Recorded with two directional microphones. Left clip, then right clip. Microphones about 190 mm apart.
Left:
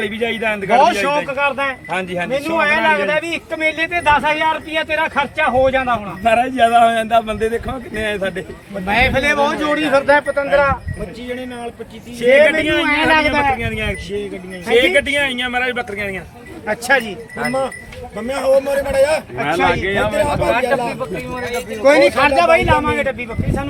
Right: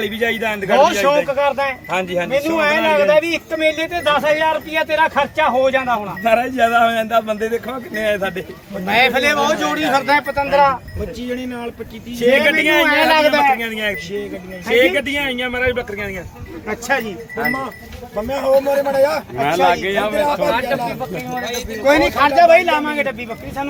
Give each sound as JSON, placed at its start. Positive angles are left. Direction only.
{"t": 0.0, "sound": "a man's voice", "side_deg": -5}
{"t": 9.2, "sound": "speech", "side_deg": -40}
{"t": 11.3, "sound": "speech", "side_deg": -20}
{"t": 12.3, "sound": "speech", "side_deg": -50}
{"t": 13.3, "sound": "a man's voice", "side_deg": -30}
{"t": 14.7, "sound": "a man's voice", "side_deg": 35}
{"t": 16.6, "sound": "a man's voice", "side_deg": 50}
{"t": 19.6, "sound": "a man's voice", "side_deg": -35}
{"t": 21.8, "sound": "a man's voice", "side_deg": 45}
{"t": 22.4, "sound": "a man's voice", "side_deg": 20}